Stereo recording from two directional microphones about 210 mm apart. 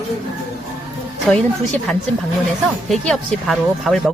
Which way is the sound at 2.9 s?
Centre (ahead or behind).